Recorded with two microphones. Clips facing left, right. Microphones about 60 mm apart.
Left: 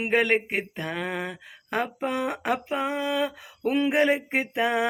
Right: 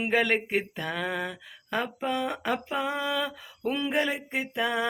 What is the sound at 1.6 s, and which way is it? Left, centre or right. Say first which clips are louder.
Speech: left 2 dB; left.